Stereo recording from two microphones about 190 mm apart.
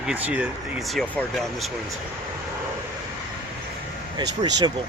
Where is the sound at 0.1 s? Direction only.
10° right (ahead or behind).